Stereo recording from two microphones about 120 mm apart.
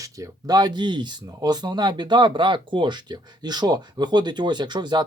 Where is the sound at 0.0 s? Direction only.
30° right (ahead or behind).